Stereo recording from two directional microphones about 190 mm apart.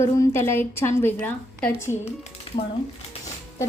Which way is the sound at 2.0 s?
35° left (ahead or behind).